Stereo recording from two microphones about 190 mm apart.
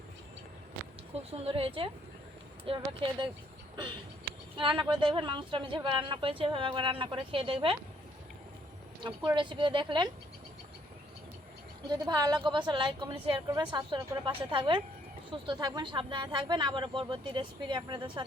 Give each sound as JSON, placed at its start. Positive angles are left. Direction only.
{"t": 1.3, "sound": "speech", "side_deg": -30}
{"t": 4.8, "sound": "speech", "side_deg": -25}
{"t": 9.3, "sound": "speech", "side_deg": -25}
{"t": 11.9, "sound": "speech", "side_deg": -20}